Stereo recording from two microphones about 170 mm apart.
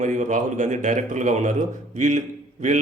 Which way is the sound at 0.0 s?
45° right (ahead or behind).